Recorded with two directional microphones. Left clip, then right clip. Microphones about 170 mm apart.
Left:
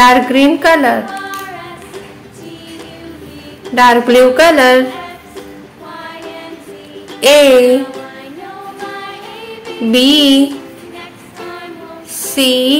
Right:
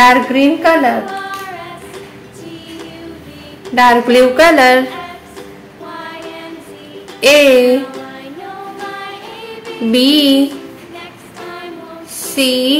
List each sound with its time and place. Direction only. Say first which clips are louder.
0.3 s a woman's voice: left 2 dB; 25° left (ahead or behind)
1.0 s child singing: even; centre (ahead or behind)
3.7 s speech: left 1 dB; 15° left (ahead or behind)
5.9 s music: even; centre (ahead or behind)
7.2 s speech: left 1 dB; 15° left (ahead or behind)
8.7 s music: even; centre (ahead or behind)
9.8 s speech: left 2 dB; 15° left (ahead or behind)
11.4 s female singing: even; centre (ahead or behind)
12.4 s speech: left 2 dB; 15° left (ahead or behind)